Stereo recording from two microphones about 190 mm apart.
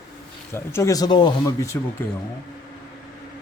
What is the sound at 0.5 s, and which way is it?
Speech, 15° left (ahead or behind).